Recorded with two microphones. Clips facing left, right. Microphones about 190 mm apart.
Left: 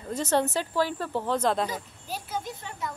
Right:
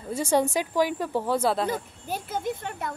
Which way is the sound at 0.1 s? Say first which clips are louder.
Right 2 dB; 10° right (ahead or behind).